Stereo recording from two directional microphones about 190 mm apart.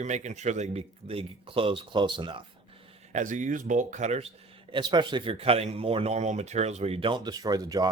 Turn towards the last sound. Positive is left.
turn(degrees=-20)  # may be behind; listen again after turning